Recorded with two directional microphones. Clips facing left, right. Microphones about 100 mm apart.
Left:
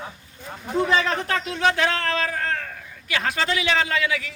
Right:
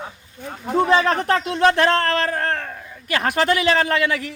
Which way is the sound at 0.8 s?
40° right (ahead or behind).